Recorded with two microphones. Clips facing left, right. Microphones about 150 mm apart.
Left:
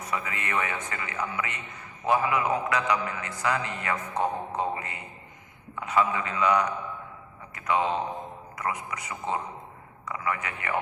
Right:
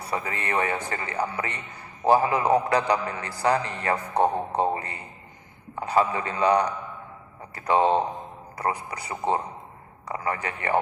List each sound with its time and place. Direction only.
0.0 s a man's voice: 35° right (ahead or behind)